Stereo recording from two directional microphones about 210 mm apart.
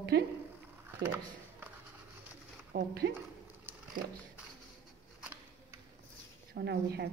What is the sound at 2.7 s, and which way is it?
Speech, 50° right (ahead or behind).